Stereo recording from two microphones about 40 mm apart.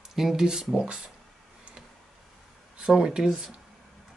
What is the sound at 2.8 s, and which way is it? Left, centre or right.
Speech, centre.